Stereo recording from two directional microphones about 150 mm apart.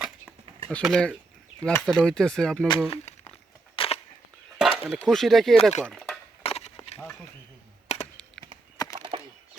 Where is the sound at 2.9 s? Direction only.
45° left (ahead or behind).